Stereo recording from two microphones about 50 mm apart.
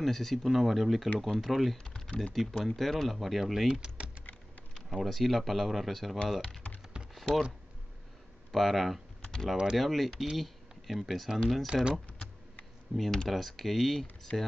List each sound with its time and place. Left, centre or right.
0.0 s speech: centre
2.0 s typing: centre
2.3 s speech: centre
5.0 s speech: centre
7.2 s a sound: centre
8.5 s speech: centre
11.6 s speech: centre
12.9 s speech: centre
14.3 s speech: left